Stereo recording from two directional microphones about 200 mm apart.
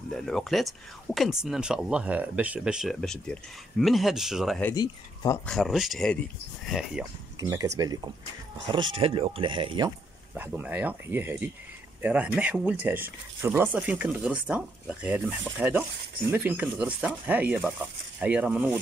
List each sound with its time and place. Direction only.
0.1 s speech: centre (ahead or behind)
4.7 s speech: 20° left (ahead or behind)
5.5 s speech: centre (ahead or behind)
7.3 s speech: 15° right (ahead or behind)
10.3 s speech: 10° right (ahead or behind)